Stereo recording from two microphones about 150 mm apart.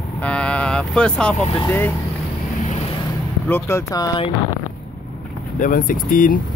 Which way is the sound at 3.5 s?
15° left (ahead or behind).